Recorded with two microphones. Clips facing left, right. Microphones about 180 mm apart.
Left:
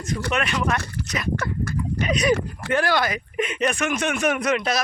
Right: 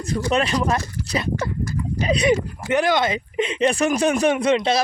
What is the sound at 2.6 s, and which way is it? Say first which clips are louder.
Speech: right 3 dB; 20° right (ahead or behind).